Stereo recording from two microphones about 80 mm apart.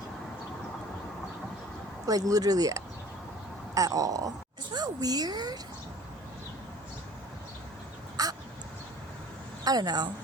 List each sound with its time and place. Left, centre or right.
2.0 s speech: right
8.1 s crow: right
9.6 s speech: right